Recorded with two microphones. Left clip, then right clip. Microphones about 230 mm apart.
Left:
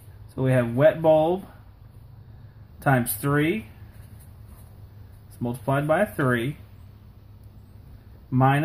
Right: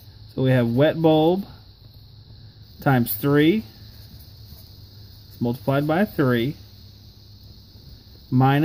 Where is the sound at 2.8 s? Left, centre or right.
Right.